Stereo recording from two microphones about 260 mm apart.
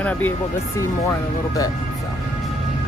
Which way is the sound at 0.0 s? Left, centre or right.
Centre.